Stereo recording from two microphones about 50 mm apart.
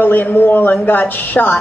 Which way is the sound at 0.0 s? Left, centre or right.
Left.